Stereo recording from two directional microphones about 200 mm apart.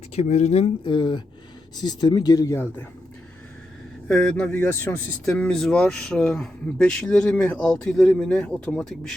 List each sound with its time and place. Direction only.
0.2 s speech: 35° left (ahead or behind); by 2.6 s 15° left (ahead or behind)
4.1 s speech: 5° left (ahead or behind)